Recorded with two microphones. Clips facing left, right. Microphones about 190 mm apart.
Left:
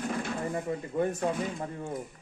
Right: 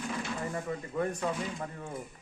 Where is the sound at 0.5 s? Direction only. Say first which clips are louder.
Left 4 dB; 20° left (ahead or behind).